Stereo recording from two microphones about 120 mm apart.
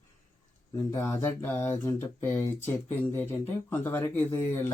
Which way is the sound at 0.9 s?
20° left (ahead or behind).